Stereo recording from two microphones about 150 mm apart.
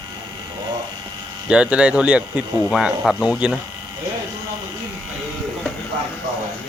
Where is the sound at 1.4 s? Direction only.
5° right (ahead or behind).